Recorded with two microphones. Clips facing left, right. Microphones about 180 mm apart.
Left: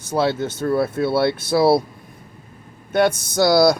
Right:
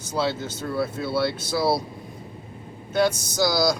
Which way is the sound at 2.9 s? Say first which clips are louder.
Left 4 dB; 60° left (ahead or behind).